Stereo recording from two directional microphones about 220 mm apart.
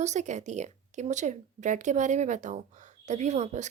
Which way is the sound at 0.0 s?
30° right (ahead or behind).